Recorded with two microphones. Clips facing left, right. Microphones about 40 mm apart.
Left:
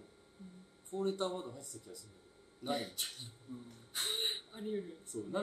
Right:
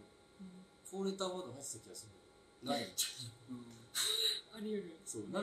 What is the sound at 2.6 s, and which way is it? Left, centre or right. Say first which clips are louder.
Music: left 1 dB; centre.